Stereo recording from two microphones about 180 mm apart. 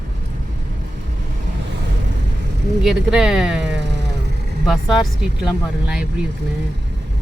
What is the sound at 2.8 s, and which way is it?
Speech, 5° right (ahead or behind).